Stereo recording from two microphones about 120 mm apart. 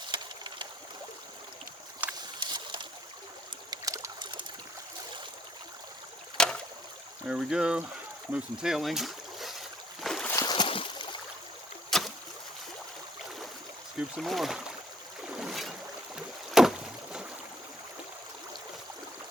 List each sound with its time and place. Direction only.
0.1 s a sound: 40° right (ahead or behind)
2.0 s boat: 15° right (ahead or behind)
2.4 s a sound: 40° right (ahead or behind)
3.7 s trickle: 30° right (ahead or behind)
4.2 s a sound: 40° right (ahead or behind)
6.3 s rowboat: 5° left (ahead or behind)
7.3 s speech: 5° right (ahead or behind)
8.3 s boat: 5° right (ahead or behind)
10.3 s boat: 35° left (ahead or behind)
11.9 s boat: centre (ahead or behind)
14.2 s speech: centre (ahead or behind)
15.3 s boat: 5° right (ahead or behind)
16.1 s rowboat: 5° right (ahead or behind)